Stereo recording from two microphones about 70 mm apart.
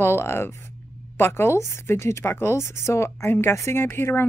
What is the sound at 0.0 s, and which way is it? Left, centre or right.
Speech, left.